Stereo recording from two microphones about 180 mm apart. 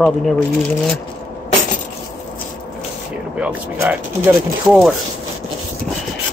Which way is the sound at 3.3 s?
10° right (ahead or behind).